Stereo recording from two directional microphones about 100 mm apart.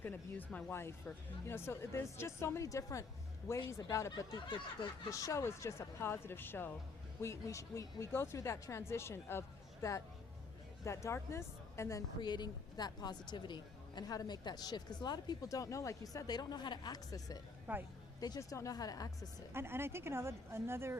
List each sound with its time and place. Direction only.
0.0 s speech: 20° left (ahead or behind)
4.2 s a woman's voice: 45° left (ahead or behind)
5.1 s speech: 30° left (ahead or behind)
10.8 s speech: 30° left (ahead or behind)
12.2 s a woman's voice: 45° left (ahead or behind)
17.7 s a woman's voice: 15° right (ahead or behind)
18.3 s speech: 30° left (ahead or behind)
19.5 s speech: 25° right (ahead or behind)